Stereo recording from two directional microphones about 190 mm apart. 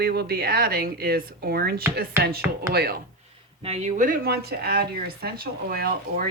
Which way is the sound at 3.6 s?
35° right (ahead or behind).